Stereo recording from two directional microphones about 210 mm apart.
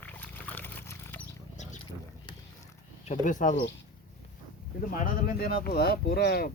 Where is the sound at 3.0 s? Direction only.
35° left (ahead or behind).